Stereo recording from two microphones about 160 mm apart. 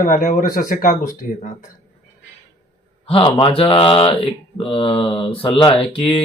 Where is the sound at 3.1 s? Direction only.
30° left (ahead or behind).